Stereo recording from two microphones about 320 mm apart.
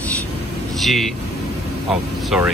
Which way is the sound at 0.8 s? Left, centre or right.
Centre.